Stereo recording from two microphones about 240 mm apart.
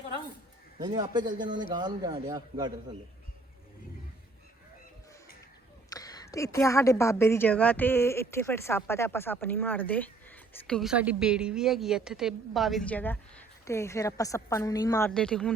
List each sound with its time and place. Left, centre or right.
0.8 s a man's voice: centre
5.9 s a woman's voice: centre